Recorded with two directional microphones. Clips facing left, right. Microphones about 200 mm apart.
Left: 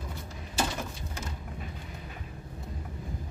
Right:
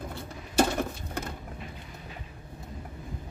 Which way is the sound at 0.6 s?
55° right (ahead or behind).